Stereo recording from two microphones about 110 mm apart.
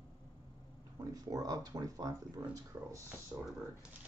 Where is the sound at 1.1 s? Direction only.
35° right (ahead or behind).